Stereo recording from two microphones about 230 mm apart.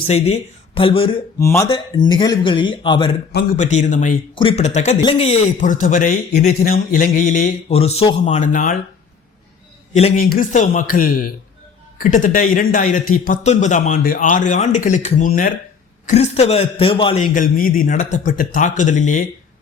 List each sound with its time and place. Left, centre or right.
0.1 s a man's voice: left
3.6 s a man's voice: left
9.9 s a man's voice: left
16.0 s a man's voice: left
17.3 s a man's voice: left